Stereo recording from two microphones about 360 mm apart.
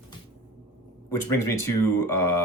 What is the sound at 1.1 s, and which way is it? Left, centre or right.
Speech, left.